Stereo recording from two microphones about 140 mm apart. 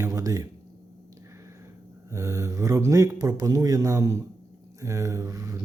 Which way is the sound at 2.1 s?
25° right (ahead or behind).